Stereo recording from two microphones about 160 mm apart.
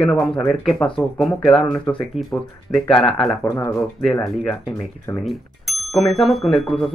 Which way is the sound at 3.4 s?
20° left (ahead or behind).